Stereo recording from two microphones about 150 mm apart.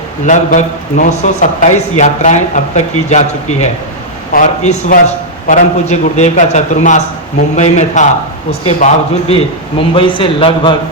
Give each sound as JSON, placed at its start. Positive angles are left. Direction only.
{"t": 0.3, "sound": "a man's voice", "side_deg": 55}